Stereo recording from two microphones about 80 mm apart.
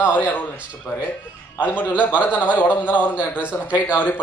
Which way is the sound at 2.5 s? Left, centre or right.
Left.